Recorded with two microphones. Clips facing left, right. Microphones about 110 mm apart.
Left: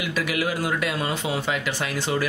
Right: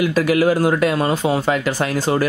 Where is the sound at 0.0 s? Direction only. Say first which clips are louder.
Right 10 dB; 40° right (ahead or behind).